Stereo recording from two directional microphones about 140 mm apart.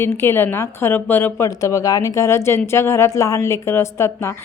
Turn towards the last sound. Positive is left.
turn(degrees=20)  # may be behind; listen again after turning